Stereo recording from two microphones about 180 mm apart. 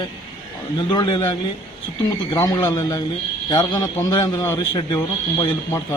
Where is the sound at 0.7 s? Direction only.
25° left (ahead or behind).